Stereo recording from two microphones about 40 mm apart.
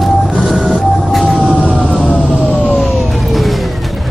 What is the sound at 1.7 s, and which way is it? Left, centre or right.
Fire engine, right.